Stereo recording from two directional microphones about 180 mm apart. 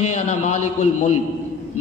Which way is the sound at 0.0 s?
40° left (ahead or behind).